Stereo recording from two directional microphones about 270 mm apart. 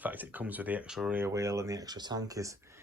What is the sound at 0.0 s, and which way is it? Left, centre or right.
Speech, centre.